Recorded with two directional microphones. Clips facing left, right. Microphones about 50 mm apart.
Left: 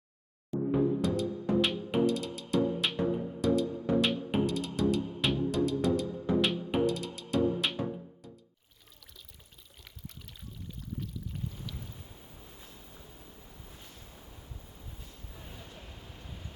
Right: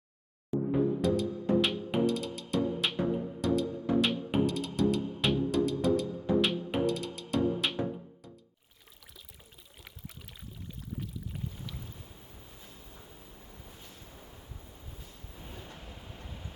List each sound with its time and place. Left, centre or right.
0.5 s music: right
1.0 s music: centre
10.9 s boat: centre
15.3 s a sound: centre
15.8 s vehicle: centre
16.1 s vehicle: right